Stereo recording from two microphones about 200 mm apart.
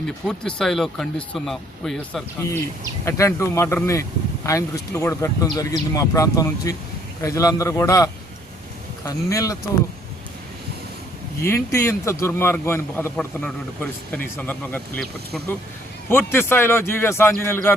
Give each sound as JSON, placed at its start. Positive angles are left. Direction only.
{"t": 0.3, "sound": "a man's voice", "side_deg": 0}
{"t": 11.4, "sound": "a man's voice", "side_deg": 15}